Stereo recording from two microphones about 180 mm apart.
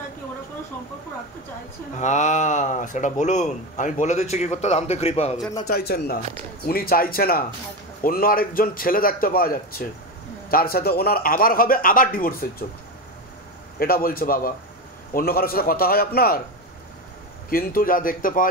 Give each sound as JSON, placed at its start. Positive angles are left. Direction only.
{"t": 2.0, "sound": "speech", "side_deg": 40}
{"t": 5.7, "sound": "a man's voice", "side_deg": 60}
{"t": 13.7, "sound": "a man's voice", "side_deg": 55}
{"t": 17.5, "sound": "a man's voice", "side_deg": 55}